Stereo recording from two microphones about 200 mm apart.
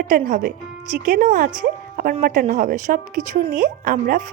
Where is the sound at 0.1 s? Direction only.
40° right (ahead or behind).